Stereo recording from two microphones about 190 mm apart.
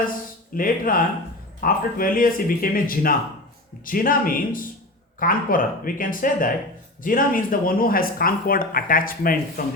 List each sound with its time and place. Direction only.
0.5 s speech: 50° left (ahead or behind)